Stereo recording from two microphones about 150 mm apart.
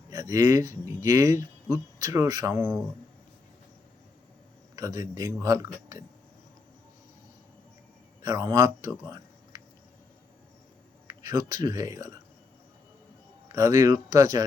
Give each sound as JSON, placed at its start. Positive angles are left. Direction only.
{"t": 0.1, "sound": "speech", "side_deg": -25}
{"t": 4.7, "sound": "a man's voice", "side_deg": -25}
{"t": 8.2, "sound": "speech", "side_deg": -25}
{"t": 11.1, "sound": "speech", "side_deg": -25}
{"t": 13.5, "sound": "a man's voice", "side_deg": -25}